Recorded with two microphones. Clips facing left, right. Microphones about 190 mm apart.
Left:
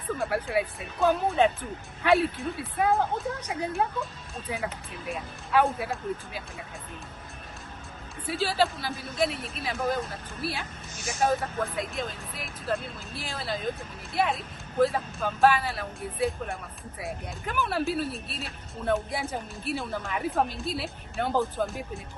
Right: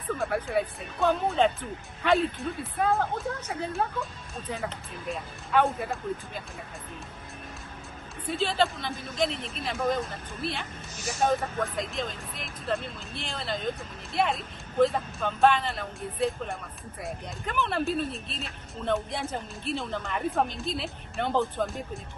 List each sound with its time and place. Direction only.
0.2 s speech: centre (ahead or behind)
2.8 s speech: 15° left (ahead or behind)
8.3 s speech: 5° left (ahead or behind)